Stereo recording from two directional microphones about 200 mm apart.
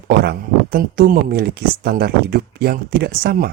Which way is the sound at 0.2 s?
50° right (ahead or behind).